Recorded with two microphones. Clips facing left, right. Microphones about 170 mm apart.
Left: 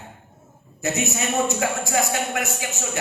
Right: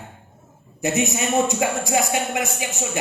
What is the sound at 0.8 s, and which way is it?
A man's voice, 20° right (ahead or behind).